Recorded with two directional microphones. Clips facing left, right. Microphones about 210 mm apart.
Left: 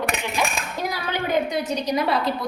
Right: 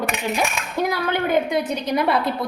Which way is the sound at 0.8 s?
55° right (ahead or behind).